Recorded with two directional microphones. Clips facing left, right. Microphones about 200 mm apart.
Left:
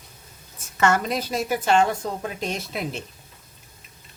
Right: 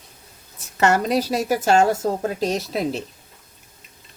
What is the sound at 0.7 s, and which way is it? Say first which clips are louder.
Speech: right 3 dB; 35° right (ahead or behind).